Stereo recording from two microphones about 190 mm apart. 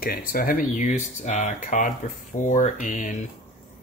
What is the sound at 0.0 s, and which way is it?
Speech, 50° left (ahead or behind).